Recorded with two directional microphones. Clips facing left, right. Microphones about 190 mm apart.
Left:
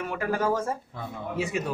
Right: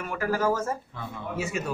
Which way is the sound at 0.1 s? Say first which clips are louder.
Right 2 dB; 20° left (ahead or behind).